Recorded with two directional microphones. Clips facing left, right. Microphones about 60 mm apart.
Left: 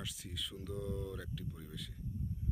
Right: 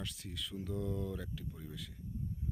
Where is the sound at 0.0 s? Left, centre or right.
Centre.